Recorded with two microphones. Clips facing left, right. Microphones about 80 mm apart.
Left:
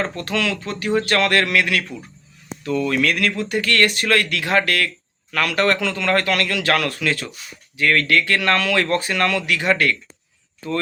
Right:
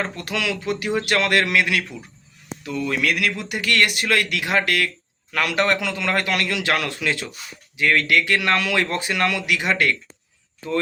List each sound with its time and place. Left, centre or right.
0.0 s a man's voice: centre